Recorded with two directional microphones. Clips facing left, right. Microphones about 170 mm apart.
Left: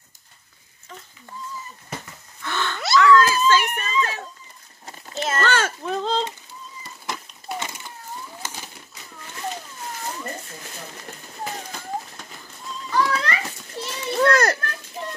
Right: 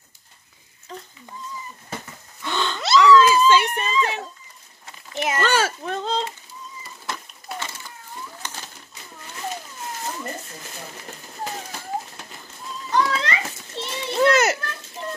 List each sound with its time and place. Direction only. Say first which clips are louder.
2.4 s a sound: right 2 dB; 20° right (ahead or behind)
3.6 s speech: right 2 dB; 30° right (ahead or behind)
5.1 s a child's voice: right 1 dB; 15° right (ahead or behind)
5.9 s speech: left 2 dB; centre (ahead or behind)
7.5 s a sound: left 2 dB; 15° left (ahead or behind)
8.4 s bird: left 1 dB; 10° left (ahead or behind)
12.9 s children playing: even; 20° right (ahead or behind)